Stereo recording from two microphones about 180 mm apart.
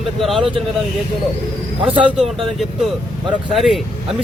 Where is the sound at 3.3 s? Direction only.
Centre (ahead or behind).